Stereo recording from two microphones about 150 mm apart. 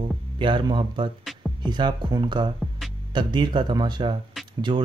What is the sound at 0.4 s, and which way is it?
Speech, 30° right (ahead or behind).